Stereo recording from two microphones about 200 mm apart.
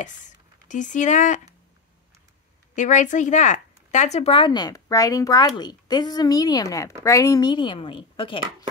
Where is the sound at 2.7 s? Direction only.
35° left (ahead or behind).